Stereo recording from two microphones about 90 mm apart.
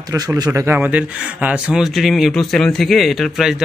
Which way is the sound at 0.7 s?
15° right (ahead or behind).